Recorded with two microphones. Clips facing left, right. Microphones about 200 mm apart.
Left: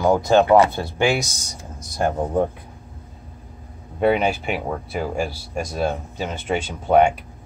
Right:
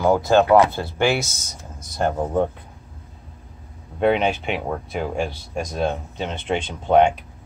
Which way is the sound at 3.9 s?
5° left (ahead or behind).